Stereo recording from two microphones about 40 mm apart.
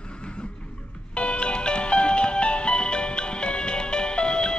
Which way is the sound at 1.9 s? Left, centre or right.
Left.